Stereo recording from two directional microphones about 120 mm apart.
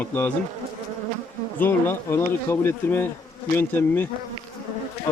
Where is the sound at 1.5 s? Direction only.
15° left (ahead or behind).